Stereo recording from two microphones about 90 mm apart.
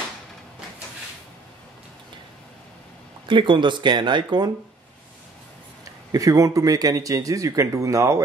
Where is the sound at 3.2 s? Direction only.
70° right (ahead or behind).